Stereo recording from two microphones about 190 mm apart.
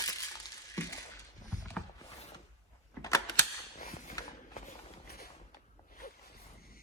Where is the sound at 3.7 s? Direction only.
45° left (ahead or behind).